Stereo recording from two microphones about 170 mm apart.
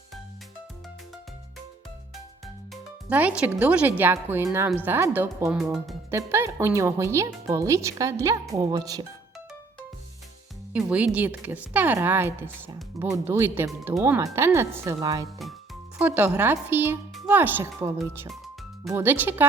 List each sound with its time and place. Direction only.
3.1 s speech: 10° right (ahead or behind)
6.1 s speech: 15° right (ahead or behind)
10.7 s speech: 5° right (ahead or behind)
16.0 s speech: 10° right (ahead or behind)